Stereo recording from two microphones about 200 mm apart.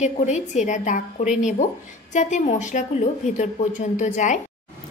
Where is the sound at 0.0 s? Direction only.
35° left (ahead or behind).